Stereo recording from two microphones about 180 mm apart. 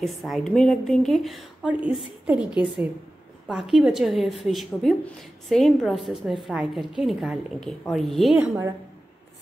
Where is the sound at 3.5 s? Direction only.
5° right (ahead or behind).